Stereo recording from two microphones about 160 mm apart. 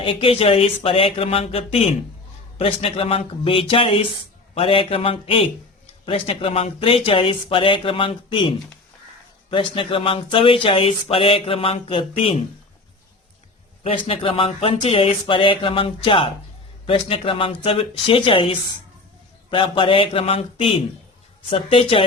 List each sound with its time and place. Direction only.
0.0 s speech: 35° left (ahead or behind)
13.8 s speech: 35° left (ahead or behind)